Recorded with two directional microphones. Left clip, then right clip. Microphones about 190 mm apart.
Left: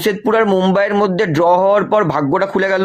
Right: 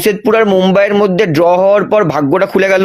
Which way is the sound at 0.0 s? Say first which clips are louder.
Right 4 dB; 30° right (ahead or behind).